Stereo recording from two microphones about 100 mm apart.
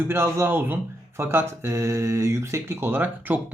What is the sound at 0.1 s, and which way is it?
Speech, 25° right (ahead or behind).